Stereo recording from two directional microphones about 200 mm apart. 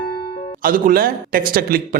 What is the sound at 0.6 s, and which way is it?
Speech, 45° right (ahead or behind).